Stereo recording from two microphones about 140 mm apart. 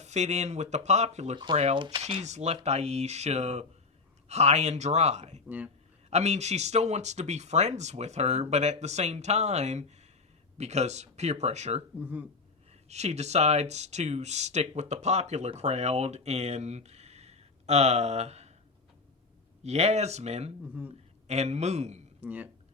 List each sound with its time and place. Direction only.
0.0 s speech: 55° right (ahead or behind)
1.7 s speech: 35° right (ahead or behind)
2.0 s speech: 45° right (ahead or behind)
5.5 s speech: 10° right (ahead or behind)
6.1 s speech: 50° right (ahead or behind)
11.9 s speech: 15° right (ahead or behind)
12.9 s speech: 50° right (ahead or behind)
19.6 s speech: 50° right (ahead or behind)
22.2 s speech: 10° right (ahead or behind)